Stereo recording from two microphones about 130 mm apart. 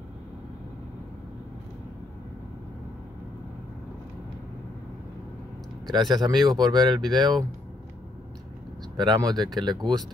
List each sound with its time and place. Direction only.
5.9 s speech: 30° right (ahead or behind)
8.9 s speech: 35° right (ahead or behind)